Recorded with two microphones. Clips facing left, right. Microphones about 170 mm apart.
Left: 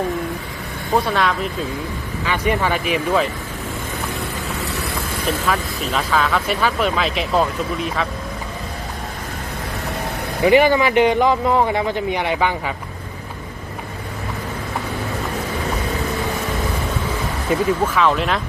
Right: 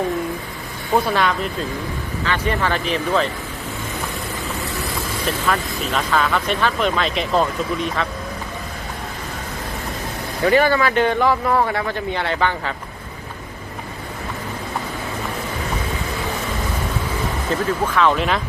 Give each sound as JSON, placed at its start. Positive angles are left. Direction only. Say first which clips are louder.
{"t": 0.9, "sound": "speech", "louder": "even", "side_deg": 0}
{"t": 2.2, "sound": "a man's voice", "louder": "left 2 dB", "side_deg": 10}
{"t": 5.5, "sound": "speech", "louder": "even", "side_deg": 5}
{"t": 10.4, "sound": "a man's voice", "louder": "left 2 dB", "side_deg": 15}
{"t": 17.5, "sound": "speech", "louder": "left 3 dB", "side_deg": 0}